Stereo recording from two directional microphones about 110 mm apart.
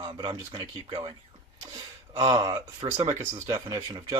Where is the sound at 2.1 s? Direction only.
40° right (ahead or behind).